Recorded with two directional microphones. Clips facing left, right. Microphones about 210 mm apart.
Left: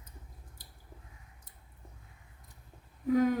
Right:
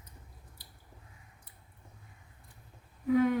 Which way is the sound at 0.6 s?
45° left (ahead or behind).